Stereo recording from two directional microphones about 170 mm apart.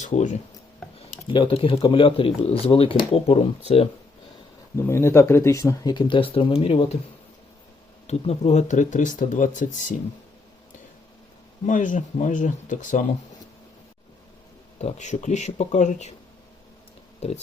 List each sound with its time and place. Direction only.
0.0 s speech: 45° left (ahead or behind)
1.1 s speech: 30° left (ahead or behind)
4.8 s speech: 15° left (ahead or behind); by 6.9 s 35° left (ahead or behind)
8.0 s speech: 40° left (ahead or behind)
11.6 s speech: 50° left (ahead or behind)
14.8 s speech: 45° left (ahead or behind)
17.2 s speech: 40° left (ahead or behind)